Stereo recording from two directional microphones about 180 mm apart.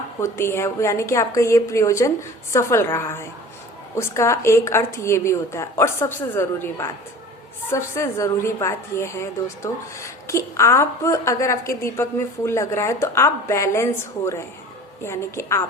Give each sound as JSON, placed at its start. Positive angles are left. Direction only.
{"t": 0.2, "sound": "a woman's voice", "side_deg": 15}